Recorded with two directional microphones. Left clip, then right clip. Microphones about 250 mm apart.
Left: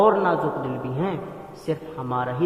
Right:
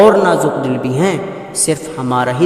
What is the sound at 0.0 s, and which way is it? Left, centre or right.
A woman's voice, right.